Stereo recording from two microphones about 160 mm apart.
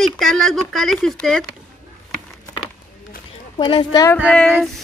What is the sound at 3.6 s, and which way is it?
Speech, 30° left (ahead or behind).